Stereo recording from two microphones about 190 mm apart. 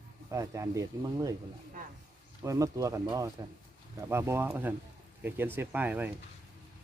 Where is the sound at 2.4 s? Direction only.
15° right (ahead or behind).